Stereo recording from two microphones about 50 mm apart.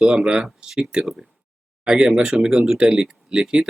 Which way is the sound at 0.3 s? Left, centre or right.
Centre.